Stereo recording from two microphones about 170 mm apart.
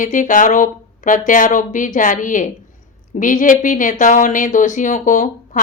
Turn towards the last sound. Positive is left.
turn(degrees=50)  # may be behind; listen again after turning